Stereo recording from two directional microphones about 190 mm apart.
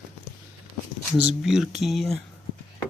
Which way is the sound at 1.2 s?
5° right (ahead or behind).